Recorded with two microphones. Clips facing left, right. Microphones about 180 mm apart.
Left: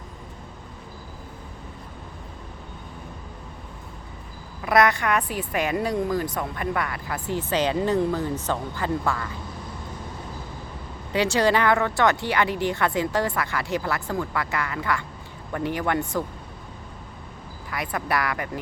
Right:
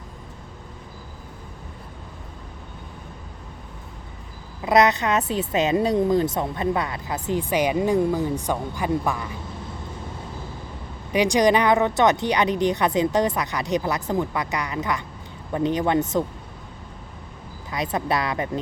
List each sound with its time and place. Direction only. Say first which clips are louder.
4.6 s a woman's voice: right 2 dB; 20° right (ahead or behind)
11.1 s a woman's voice: right 3 dB; 15° right (ahead or behind)
17.7 s a woman's voice: right 3 dB; 20° right (ahead or behind)